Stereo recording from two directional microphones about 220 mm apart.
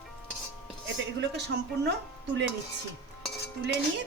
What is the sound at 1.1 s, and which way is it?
Speech, 50° right (ahead or behind).